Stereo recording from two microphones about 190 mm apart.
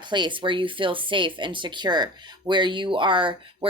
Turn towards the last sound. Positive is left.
turn(degrees=-25)  # may be behind; listen again after turning